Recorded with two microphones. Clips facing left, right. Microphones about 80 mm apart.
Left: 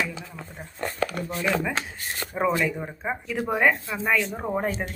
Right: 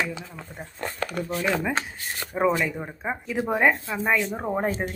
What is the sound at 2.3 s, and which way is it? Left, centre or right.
Speech, centre.